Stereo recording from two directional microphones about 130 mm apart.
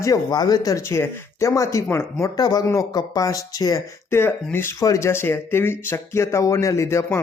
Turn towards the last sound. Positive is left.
turn(degrees=25)  # may be behind; listen again after turning